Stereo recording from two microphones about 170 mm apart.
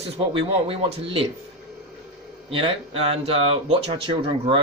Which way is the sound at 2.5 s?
35° right (ahead or behind).